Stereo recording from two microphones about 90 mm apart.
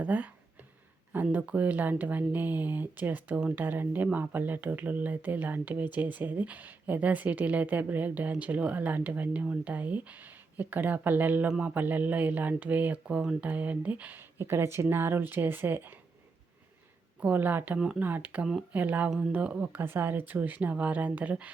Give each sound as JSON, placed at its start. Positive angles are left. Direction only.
{"t": 0.0, "sound": "speech", "side_deg": -15}
{"t": 17.2, "sound": "speech", "side_deg": -20}